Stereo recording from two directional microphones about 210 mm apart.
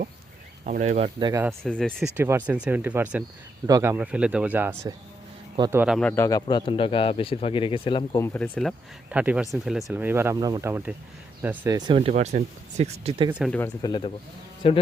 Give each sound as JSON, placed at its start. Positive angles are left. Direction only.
{"t": 0.6, "sound": "speech", "side_deg": -35}
{"t": 1.2, "sound": "speech", "side_deg": -15}
{"t": 1.5, "sound": "speech", "side_deg": 0}
{"t": 2.1, "sound": "speech", "side_deg": -10}
{"t": 5.8, "sound": "speech", "side_deg": 0}
{"t": 8.2, "sound": "speech", "side_deg": 5}
{"t": 9.0, "sound": "speech", "side_deg": -5}
{"t": 13.4, "sound": "speech", "side_deg": 5}
{"t": 13.8, "sound": "speech", "side_deg": 25}